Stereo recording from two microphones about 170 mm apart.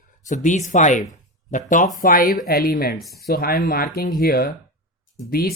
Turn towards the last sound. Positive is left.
turn(degrees=60)  # may be behind; listen again after turning